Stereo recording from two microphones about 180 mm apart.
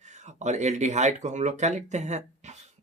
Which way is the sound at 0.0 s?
40° right (ahead or behind).